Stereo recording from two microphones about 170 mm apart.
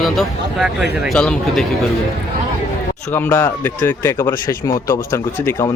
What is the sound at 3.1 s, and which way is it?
Speech, 15° left (ahead or behind).